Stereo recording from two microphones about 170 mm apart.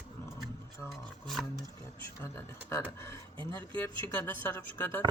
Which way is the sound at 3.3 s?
30° right (ahead or behind).